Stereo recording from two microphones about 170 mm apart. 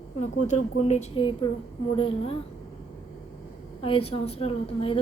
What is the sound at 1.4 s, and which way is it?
Speech, 25° left (ahead or behind).